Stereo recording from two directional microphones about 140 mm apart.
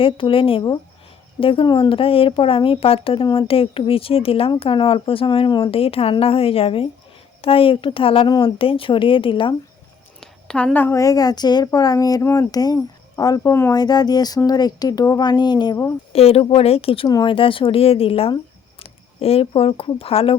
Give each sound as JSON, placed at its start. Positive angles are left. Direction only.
{"t": 0.0, "sound": "speech", "side_deg": 40}
{"t": 10.2, "sound": "a woman's voice", "side_deg": 5}
{"t": 16.1, "sound": "speech", "side_deg": 45}
{"t": 17.1, "sound": "a woman's voice", "side_deg": 25}
{"t": 17.3, "sound": "speech", "side_deg": 40}